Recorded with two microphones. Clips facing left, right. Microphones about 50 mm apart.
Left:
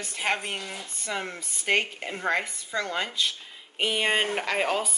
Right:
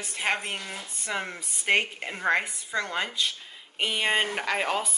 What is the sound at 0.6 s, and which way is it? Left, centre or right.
Speech, centre.